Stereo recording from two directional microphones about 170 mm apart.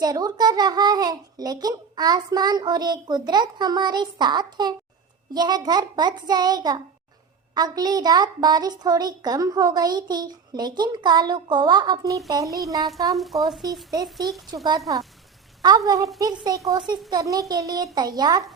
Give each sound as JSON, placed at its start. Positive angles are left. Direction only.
{"t": 0.0, "sound": "a child's voice", "side_deg": -25}
{"t": 13.1, "sound": "speech", "side_deg": 0}
{"t": 13.9, "sound": "a child's voice", "side_deg": -20}